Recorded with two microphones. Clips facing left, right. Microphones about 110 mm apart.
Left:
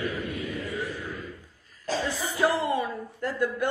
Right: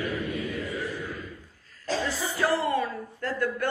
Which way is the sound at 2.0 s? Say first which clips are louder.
Left 3 dB; 15° left (ahead or behind).